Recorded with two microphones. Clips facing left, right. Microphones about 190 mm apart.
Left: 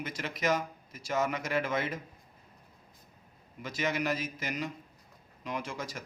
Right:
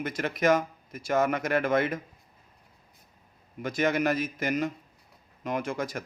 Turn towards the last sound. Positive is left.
turn(degrees=-55)  # may be behind; listen again after turning